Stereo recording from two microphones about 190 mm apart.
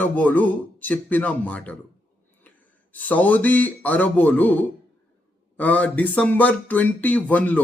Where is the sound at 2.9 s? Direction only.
10° left (ahead or behind).